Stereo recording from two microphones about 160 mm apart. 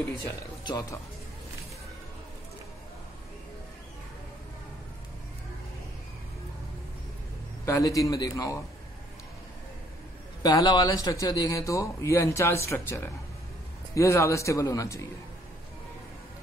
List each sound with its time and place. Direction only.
0.7 s speech: 20° left (ahead or behind)
7.6 s speech: 20° left (ahead or behind)
10.4 s speech: 25° left (ahead or behind)